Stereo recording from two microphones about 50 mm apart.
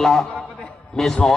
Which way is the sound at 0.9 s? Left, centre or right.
Centre.